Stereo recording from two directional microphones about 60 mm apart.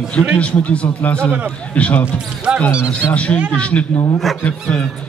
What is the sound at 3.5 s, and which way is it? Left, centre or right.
Speech, left.